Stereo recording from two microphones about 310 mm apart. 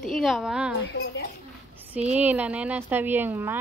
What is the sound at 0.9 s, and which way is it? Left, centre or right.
Speech, left.